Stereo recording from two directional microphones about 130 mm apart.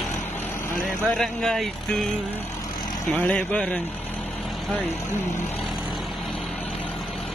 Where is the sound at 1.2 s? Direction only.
5° left (ahead or behind).